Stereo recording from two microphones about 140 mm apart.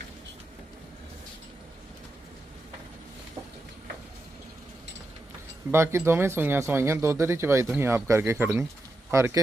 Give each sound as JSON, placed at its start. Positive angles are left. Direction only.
{"t": 5.7, "sound": "speech", "side_deg": -20}